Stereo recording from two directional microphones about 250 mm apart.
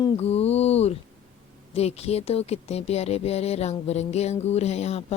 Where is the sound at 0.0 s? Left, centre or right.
Left.